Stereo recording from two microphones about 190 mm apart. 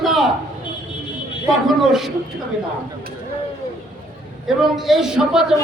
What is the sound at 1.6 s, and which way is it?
Speech, centre (ahead or behind).